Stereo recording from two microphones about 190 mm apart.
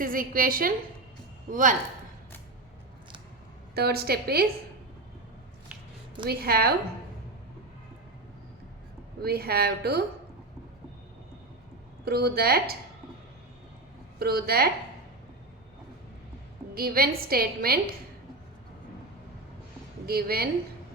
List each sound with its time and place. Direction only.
0.0 s a woman's voice: 45° right (ahead or behind)
3.8 s speech: 55° right (ahead or behind)
6.2 s speech: 55° right (ahead or behind)
9.2 s speech: 55° right (ahead or behind)
12.0 s speech: 55° right (ahead or behind)
14.2 s speech: 55° right (ahead or behind)
16.7 s a woman's voice: 50° right (ahead or behind)
20.1 s a woman's voice: 55° right (ahead or behind)